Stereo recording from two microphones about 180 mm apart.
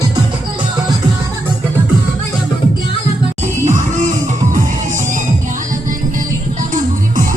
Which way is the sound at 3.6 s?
45° right (ahead or behind).